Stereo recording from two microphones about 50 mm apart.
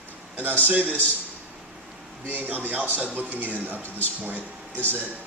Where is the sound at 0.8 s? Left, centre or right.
Right.